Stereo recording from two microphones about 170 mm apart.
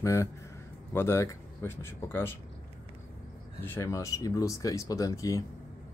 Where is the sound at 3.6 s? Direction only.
15° left (ahead or behind).